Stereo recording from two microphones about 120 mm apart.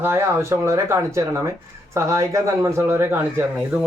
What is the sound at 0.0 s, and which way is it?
Speech, 20° right (ahead or behind).